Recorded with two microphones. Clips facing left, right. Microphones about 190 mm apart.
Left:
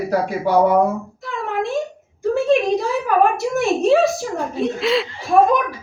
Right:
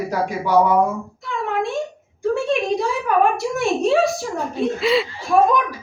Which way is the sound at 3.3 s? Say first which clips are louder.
Left 2 dB; centre (ahead or behind).